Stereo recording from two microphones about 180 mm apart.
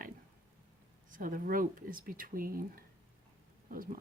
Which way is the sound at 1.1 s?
50° right (ahead or behind).